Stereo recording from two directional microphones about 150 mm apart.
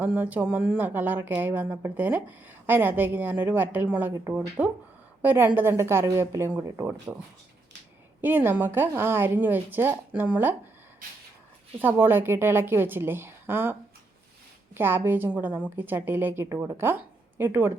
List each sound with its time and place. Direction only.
0.0 s speech: 10° right (ahead or behind)
8.2 s speech: 15° right (ahead or behind)
11.0 s a sound: 65° right (ahead or behind)
11.8 s speech: 15° right (ahead or behind)